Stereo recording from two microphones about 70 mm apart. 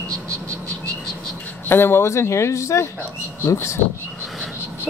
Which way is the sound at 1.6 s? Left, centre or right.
Left.